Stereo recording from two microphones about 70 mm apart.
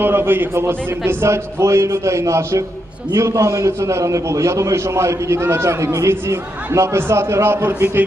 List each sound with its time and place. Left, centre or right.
0.0 s a man's voice: right